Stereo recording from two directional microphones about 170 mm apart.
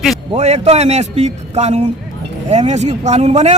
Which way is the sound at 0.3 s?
40° right (ahead or behind).